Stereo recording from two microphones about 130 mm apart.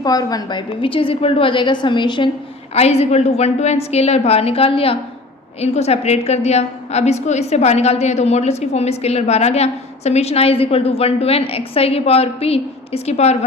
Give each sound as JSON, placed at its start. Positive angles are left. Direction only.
{"t": 0.0, "sound": "a woman's voice", "side_deg": 30}
{"t": 0.8, "sound": "a woman's voice", "side_deg": 45}
{"t": 2.7, "sound": "a woman's voice", "side_deg": 55}